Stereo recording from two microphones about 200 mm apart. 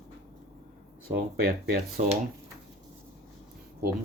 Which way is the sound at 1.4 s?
50° right (ahead or behind).